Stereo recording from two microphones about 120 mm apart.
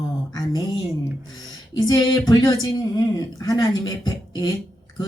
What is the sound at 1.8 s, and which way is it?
Speech, 30° left (ahead or behind).